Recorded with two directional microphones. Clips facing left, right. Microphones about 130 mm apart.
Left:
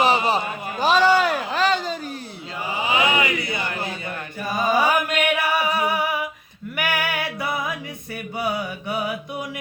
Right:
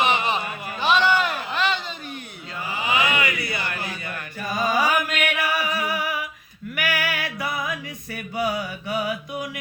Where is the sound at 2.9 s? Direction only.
25° left (ahead or behind).